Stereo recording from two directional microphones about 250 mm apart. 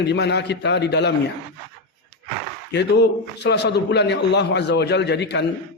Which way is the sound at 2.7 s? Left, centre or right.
Left.